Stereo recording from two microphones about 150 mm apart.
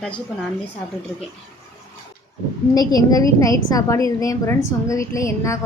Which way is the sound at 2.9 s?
25° left (ahead or behind).